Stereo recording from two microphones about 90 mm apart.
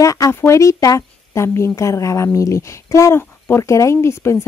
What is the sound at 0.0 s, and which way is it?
A woman's voice, 35° left (ahead or behind).